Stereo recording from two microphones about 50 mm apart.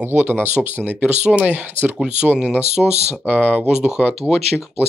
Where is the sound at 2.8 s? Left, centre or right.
Centre.